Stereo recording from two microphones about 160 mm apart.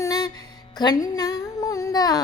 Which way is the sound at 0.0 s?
25° left (ahead or behind).